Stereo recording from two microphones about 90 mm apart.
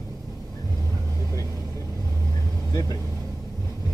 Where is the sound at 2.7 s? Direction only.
40° left (ahead or behind).